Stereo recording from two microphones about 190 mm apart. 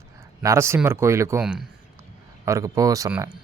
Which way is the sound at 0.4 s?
15° right (ahead or behind).